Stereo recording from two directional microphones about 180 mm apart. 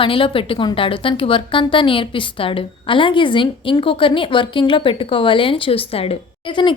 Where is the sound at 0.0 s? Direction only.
30° left (ahead or behind).